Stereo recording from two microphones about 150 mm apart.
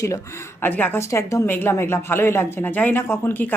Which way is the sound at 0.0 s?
20° left (ahead or behind).